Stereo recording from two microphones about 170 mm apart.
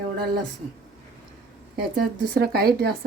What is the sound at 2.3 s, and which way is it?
Speech, 65° right (ahead or behind).